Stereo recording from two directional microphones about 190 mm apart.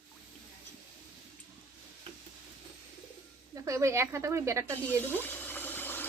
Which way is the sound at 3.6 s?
15° right (ahead or behind).